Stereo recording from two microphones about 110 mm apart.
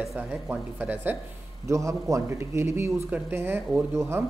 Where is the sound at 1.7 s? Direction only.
30° right (ahead or behind).